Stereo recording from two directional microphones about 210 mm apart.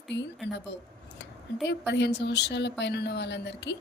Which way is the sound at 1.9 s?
55° left (ahead or behind).